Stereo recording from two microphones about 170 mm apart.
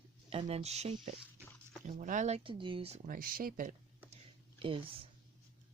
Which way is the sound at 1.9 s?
50° right (ahead or behind).